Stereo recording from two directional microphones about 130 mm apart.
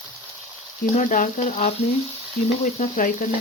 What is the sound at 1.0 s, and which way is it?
Speech, 85° left.